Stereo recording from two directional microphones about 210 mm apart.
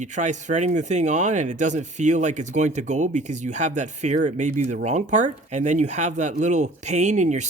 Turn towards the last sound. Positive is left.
turn(degrees=-35)  # may be behind; listen again after turning